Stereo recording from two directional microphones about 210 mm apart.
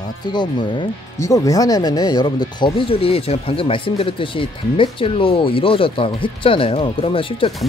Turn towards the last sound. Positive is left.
turn(degrees=25)  # may be behind; listen again after turning